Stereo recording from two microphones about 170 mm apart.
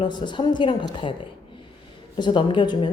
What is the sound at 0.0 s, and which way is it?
A woman's voice, 25° left (ahead or behind).